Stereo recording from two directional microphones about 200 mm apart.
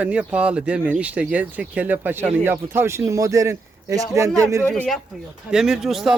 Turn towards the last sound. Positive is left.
turn(degrees=0)  # may be behind; listen again after turning